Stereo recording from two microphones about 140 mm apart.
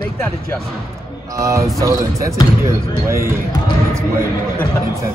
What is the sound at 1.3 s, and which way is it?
Speech, 20° right (ahead or behind).